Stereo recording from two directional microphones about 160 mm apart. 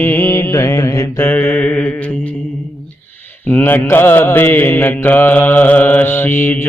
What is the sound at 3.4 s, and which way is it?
Mantra, 10° left (ahead or behind).